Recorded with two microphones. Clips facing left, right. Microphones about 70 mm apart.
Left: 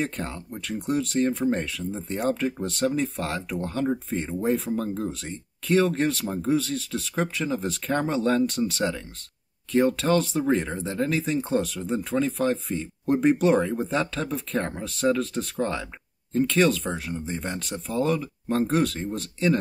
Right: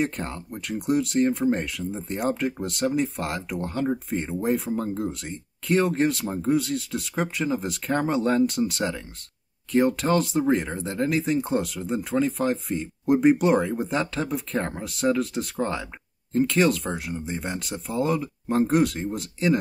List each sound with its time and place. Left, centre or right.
0.0 s speech: centre